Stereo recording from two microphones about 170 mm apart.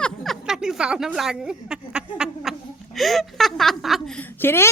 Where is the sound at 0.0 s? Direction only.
Centre (ahead or behind).